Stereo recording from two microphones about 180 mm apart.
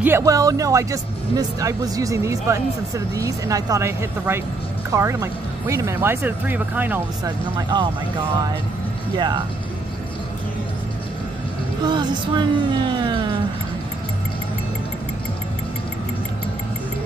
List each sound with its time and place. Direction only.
0.0 s music: 15° right (ahead or behind)
1.3 s speech: 20° right (ahead or behind)
7.2 s music: 25° right (ahead or behind)
9.1 s music: 25° right (ahead or behind)
11.8 s music: 25° right (ahead or behind)